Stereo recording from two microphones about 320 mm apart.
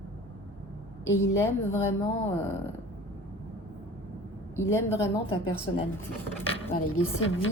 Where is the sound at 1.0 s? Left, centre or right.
Centre.